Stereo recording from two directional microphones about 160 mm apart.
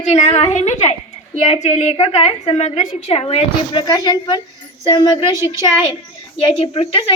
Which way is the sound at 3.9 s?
25° left (ahead or behind).